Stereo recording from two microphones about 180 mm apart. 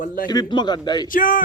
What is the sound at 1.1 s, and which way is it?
Speech, 50° left (ahead or behind).